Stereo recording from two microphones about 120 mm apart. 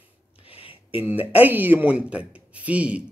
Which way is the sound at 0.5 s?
50° left (ahead or behind).